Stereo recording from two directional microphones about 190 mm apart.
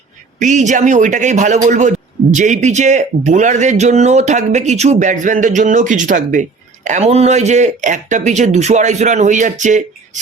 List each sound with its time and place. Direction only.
0.3 s a man's voice: 40° right (ahead or behind)